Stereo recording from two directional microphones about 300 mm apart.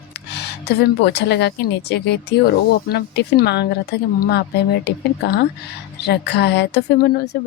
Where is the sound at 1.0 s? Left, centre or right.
Left.